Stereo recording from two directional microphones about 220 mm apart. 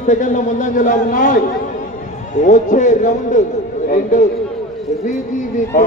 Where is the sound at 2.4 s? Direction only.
35° left (ahead or behind).